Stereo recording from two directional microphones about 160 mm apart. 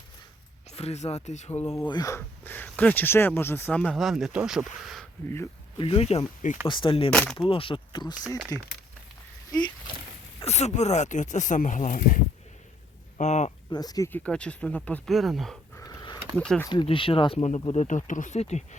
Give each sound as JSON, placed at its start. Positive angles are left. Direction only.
{"t": 0.7, "sound": "speech", "side_deg": 40}
{"t": 1.9, "sound": "speech", "side_deg": 20}
{"t": 5.7, "sound": "speech", "side_deg": 35}
{"t": 6.7, "sound": "speech", "side_deg": 30}
{"t": 7.1, "sound": "speech", "side_deg": 5}
{"t": 7.3, "sound": "speech", "side_deg": 35}
{"t": 9.5, "sound": "a sound", "side_deg": 25}
{"t": 10.4, "sound": "speech", "side_deg": 45}
{"t": 13.1, "sound": "speech", "side_deg": 45}
{"t": 13.7, "sound": "speech", "side_deg": 25}
{"t": 14.1, "sound": "speech", "side_deg": 5}
{"t": 15.7, "sound": "a sound", "side_deg": 25}
{"t": 16.4, "sound": "speech", "side_deg": 5}
{"t": 16.8, "sound": "speech", "side_deg": 35}